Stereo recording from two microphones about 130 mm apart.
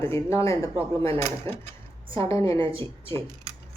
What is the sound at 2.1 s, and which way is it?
Speech, 20° left (ahead or behind).